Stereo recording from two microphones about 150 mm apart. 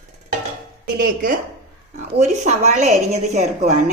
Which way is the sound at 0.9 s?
75° right (ahead or behind).